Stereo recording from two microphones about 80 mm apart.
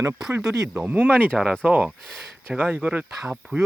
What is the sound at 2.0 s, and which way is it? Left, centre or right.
Speech, centre.